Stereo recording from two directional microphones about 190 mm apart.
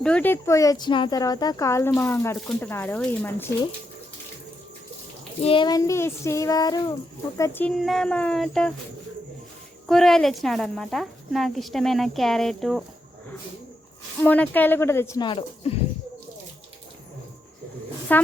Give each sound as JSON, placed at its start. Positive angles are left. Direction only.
{"t": 0.0, "sound": "speech", "side_deg": 5}
{"t": 5.4, "sound": "speech", "side_deg": 30}
{"t": 7.8, "sound": "a woman's voice", "side_deg": 0}
{"t": 9.9, "sound": "a woman's voice", "side_deg": 0}
{"t": 14.2, "sound": "speech", "side_deg": 10}
{"t": 18.1, "sound": "speech", "side_deg": 10}